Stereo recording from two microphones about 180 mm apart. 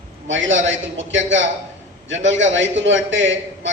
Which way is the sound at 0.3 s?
90° right.